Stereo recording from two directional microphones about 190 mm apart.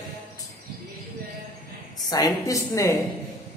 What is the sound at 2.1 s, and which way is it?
Speech, 20° left (ahead or behind).